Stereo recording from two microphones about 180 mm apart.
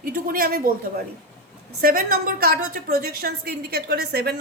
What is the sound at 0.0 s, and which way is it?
Speech, 55° right (ahead or behind).